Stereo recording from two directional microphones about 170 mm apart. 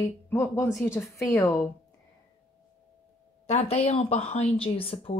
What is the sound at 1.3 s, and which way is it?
Speech, 15° left (ahead or behind).